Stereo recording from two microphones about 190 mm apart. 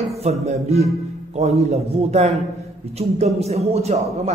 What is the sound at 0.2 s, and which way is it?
A man's voice, 35° right (ahead or behind).